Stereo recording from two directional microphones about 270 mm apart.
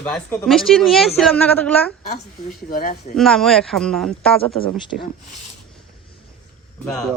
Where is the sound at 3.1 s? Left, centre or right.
Centre.